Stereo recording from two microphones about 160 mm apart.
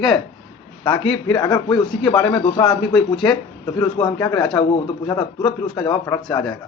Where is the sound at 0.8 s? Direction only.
30° left (ahead or behind).